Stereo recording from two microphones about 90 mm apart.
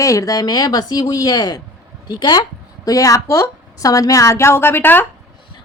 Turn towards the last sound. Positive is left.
turn(degrees=25)  # may be behind; listen again after turning